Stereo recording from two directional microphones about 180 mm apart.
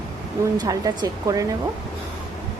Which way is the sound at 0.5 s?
20° right (ahead or behind).